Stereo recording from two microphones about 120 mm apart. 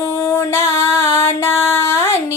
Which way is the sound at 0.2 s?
20° left (ahead or behind).